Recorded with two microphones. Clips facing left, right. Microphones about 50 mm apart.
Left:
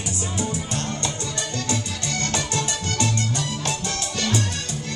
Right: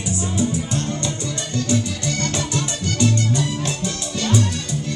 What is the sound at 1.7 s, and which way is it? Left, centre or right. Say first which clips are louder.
Music: right 5 dB; left.